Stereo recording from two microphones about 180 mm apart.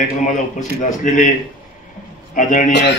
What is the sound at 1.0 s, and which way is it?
Speech, 45° left (ahead or behind).